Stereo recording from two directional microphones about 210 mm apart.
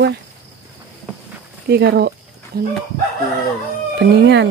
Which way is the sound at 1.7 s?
50° right (ahead or behind).